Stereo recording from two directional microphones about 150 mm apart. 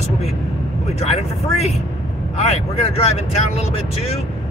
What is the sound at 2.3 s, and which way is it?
Vehicle, 45° left (ahead or behind).